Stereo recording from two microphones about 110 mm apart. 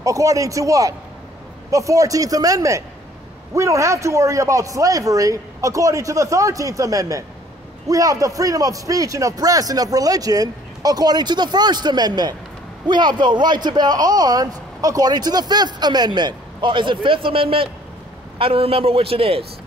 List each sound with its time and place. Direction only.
0.0 s a man's voice: 30° right (ahead or behind); by 19.4 s 60° right (ahead or behind)